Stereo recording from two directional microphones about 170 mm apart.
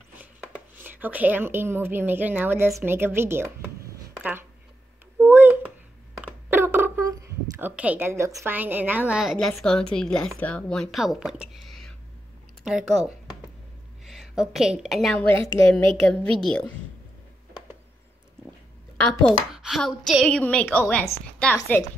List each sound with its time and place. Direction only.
0.8 s a woman's voice: 10° right (ahead or behind)
5.2 s a sound: 10° right (ahead or behind)
6.1 s a woman's voice: 15° right (ahead or behind); by 16.6 s 5° left (ahead or behind)
19.2 s a woman's voice: centre (ahead or behind)